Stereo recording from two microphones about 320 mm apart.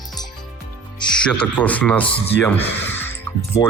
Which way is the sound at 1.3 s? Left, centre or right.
Centre.